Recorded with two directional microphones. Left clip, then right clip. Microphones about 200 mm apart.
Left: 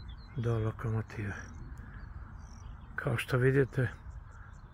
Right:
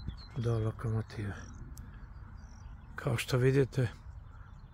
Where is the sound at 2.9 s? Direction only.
10° right (ahead or behind).